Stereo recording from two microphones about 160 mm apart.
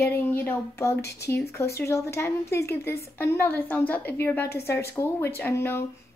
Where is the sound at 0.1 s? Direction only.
15° left (ahead or behind).